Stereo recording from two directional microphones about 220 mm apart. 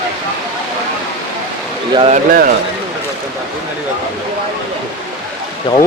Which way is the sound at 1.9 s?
25° right (ahead or behind).